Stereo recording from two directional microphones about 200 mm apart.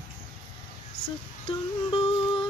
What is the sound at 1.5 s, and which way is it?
Music, 25° left (ahead or behind).